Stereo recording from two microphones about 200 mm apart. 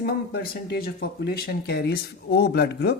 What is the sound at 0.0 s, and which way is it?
Speech, 50° left (ahead or behind).